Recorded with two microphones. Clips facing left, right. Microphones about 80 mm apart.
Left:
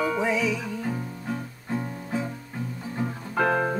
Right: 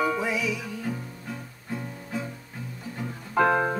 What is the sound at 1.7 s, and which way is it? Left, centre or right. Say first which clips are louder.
Guitar: left 4 dB; left.